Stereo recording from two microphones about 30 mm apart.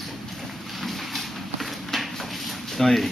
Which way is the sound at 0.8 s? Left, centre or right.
Centre.